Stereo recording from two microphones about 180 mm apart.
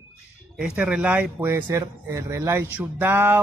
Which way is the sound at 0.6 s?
5° right (ahead or behind).